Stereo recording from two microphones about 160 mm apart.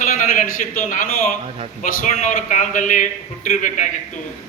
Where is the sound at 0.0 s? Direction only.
55° left (ahead or behind).